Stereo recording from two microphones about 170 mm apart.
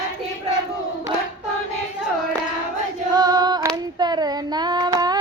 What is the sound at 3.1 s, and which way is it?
Female singing, 25° right (ahead or behind).